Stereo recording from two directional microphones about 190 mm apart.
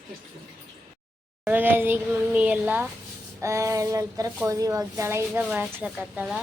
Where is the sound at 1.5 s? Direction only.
10° right (ahead or behind).